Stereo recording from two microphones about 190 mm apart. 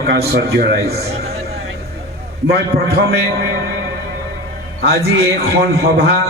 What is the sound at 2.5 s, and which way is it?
Speech, 55° right (ahead or behind).